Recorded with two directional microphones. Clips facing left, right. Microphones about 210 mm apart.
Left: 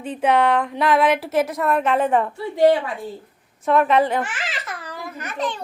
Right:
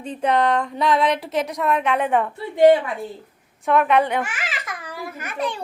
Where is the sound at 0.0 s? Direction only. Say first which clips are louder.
Left 2 dB; 5° left (ahead or behind).